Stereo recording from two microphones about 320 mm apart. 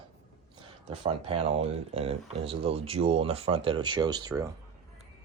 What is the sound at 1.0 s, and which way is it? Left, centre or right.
Speech, centre.